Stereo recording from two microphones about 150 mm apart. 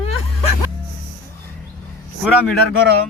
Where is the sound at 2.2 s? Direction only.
Centre (ahead or behind).